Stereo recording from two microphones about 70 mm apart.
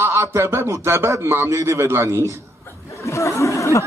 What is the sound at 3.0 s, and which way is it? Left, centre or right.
Chatter, left.